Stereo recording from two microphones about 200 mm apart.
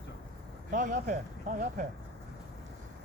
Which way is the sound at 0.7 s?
40° right (ahead or behind).